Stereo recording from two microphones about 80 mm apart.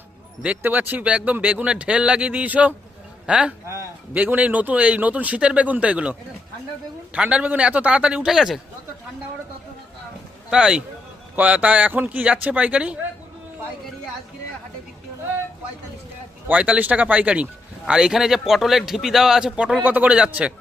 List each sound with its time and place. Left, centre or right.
0.6 s speech: right; by 8.6 s centre
10.5 s speech: centre
16.5 s speech: centre